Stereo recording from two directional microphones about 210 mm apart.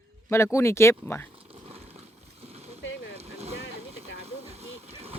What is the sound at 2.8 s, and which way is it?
Vehicle, 60° left (ahead or behind).